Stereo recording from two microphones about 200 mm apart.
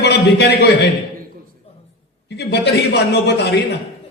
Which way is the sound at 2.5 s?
55° left (ahead or behind).